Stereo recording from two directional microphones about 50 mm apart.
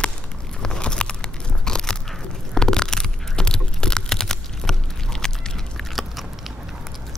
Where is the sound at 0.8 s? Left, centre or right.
Centre.